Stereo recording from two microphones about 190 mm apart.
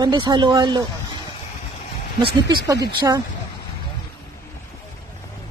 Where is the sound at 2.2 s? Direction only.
30° right (ahead or behind).